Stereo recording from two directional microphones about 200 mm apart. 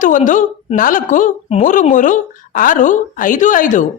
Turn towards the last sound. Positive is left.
turn(degrees=40)  # may be behind; listen again after turning